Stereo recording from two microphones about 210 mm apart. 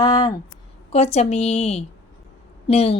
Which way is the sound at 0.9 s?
30° left (ahead or behind).